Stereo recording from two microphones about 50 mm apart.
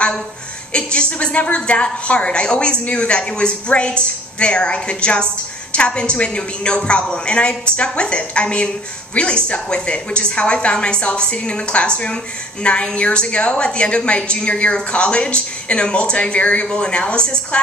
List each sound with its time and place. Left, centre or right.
0.7 s a woman's voice: centre